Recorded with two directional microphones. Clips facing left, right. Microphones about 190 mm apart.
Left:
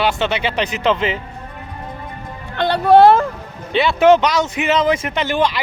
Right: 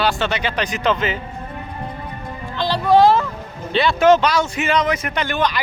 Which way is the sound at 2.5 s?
60° left (ahead or behind).